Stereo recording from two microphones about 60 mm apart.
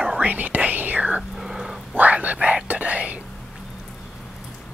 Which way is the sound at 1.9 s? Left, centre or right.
Right.